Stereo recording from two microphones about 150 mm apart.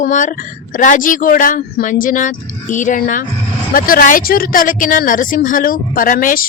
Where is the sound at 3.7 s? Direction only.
70° left (ahead or behind).